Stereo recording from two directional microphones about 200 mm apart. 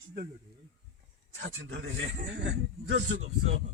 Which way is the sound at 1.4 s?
70° right (ahead or behind).